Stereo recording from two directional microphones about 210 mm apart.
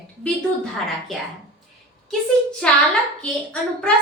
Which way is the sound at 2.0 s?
5° left (ahead or behind).